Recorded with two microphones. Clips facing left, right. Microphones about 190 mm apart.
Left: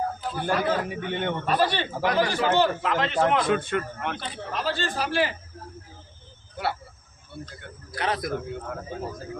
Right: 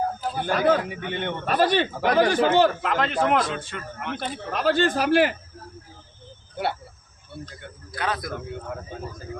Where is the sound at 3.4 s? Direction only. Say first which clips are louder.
Left 6 dB; 55° left (ahead or behind).